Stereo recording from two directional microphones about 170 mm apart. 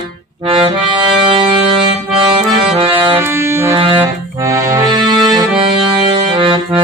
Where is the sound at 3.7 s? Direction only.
30° right (ahead or behind).